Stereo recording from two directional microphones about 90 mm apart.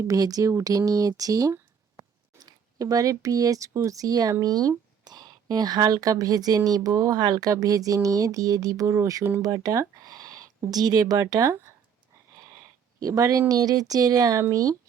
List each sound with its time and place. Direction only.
0.0 s speech: 40° right (ahead or behind)
2.0 s a sound: 50° right (ahead or behind)
3.8 s speech: 40° right (ahead or behind)
13.0 s speech: 40° right (ahead or behind)